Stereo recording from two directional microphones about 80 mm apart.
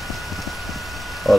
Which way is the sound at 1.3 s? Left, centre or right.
Centre.